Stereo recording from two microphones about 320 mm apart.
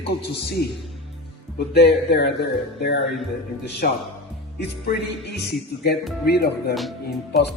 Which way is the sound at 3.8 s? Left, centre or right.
Left.